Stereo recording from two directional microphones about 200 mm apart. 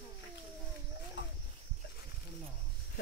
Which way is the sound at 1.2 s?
65° left (ahead or behind).